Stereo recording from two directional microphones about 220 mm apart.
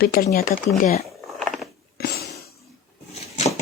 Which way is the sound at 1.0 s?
Centre (ahead or behind).